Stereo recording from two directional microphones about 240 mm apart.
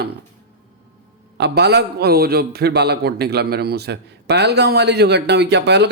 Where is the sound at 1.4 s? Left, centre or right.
Right.